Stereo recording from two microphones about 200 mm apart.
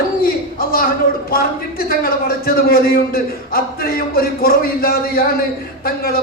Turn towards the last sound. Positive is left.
turn(degrees=50)  # may be behind; listen again after turning